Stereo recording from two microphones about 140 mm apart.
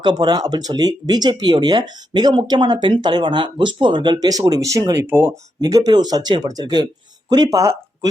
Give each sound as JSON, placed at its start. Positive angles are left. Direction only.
{"t": 0.0, "sound": "speech", "side_deg": -30}